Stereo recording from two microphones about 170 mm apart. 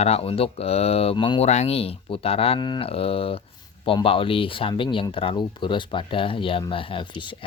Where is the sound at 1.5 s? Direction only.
40° left (ahead or behind).